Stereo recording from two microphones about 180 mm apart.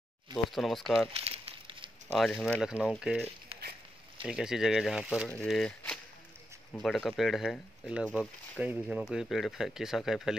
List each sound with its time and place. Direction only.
0.5 s speech: centre (ahead or behind)
1.1 s crumpling: 30° right (ahead or behind)
2.3 s speech: 10° left (ahead or behind)
2.6 s speech: 5° right (ahead or behind)